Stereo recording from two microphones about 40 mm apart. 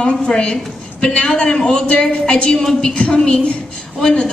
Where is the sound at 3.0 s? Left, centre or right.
Left.